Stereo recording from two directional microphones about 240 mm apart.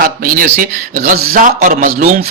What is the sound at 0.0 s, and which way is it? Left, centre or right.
Speech, right.